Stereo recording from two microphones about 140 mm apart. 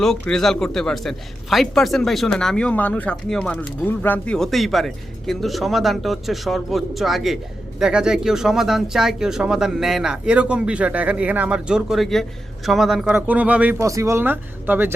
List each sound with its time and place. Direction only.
0.0 s a man's voice: 5° left (ahead or behind)
13.7 s speech: 20° right (ahead or behind)